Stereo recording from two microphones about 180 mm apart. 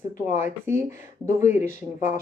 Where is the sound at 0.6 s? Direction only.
15° right (ahead or behind).